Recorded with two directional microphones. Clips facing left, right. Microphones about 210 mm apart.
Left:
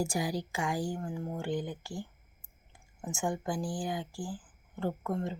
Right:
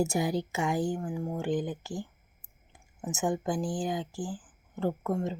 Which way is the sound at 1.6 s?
20° right (ahead or behind).